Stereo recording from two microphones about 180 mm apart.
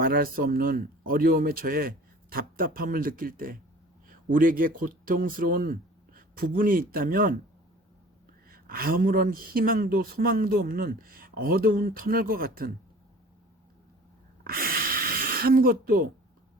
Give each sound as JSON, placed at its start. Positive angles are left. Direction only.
{"t": 0.0, "sound": "speech", "side_deg": -55}
{"t": 8.4, "sound": "speech", "side_deg": -55}
{"t": 14.4, "sound": "a sound", "side_deg": -55}